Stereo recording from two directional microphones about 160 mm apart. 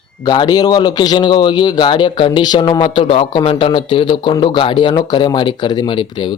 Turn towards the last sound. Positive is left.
turn(degrees=30)  # may be behind; listen again after turning